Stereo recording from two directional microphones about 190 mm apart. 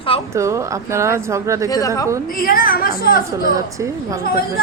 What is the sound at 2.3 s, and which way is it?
Speech, 50° left (ahead or behind).